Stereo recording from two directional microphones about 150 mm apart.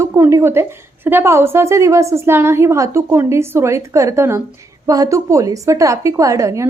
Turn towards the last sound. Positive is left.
turn(degrees=-20)  # may be behind; listen again after turning